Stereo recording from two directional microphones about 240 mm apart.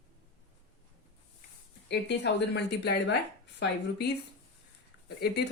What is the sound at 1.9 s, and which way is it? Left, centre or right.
A woman's voice, left.